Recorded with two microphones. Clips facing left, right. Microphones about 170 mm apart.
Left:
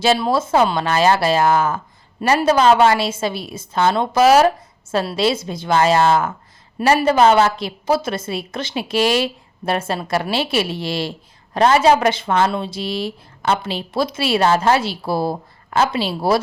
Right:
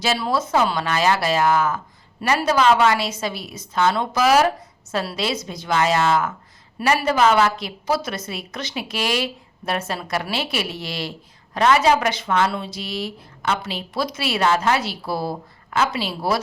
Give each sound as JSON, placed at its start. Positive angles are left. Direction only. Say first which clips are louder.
{"t": 0.0, "sound": "a woman's voice", "louder": "left 5 dB", "side_deg": 25}